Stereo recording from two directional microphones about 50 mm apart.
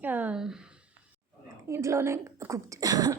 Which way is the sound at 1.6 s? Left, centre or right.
Right.